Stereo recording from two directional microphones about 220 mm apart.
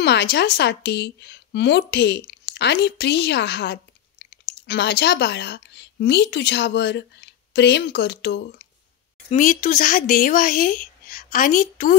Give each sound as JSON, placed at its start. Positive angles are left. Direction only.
{"t": 0.0, "sound": "speech", "side_deg": 50}
{"t": 9.3, "sound": "speech", "side_deg": 35}